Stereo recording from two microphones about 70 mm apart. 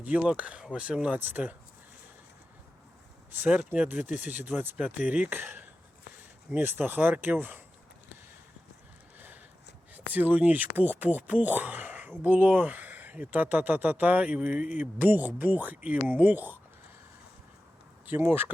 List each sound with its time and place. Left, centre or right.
0.0 s speech: centre
3.3 s speech: right
9.1 s a sound: right
9.9 s speech: right
18.1 s speech: right